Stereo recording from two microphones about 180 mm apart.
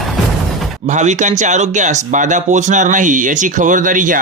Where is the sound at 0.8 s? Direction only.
40° right (ahead or behind).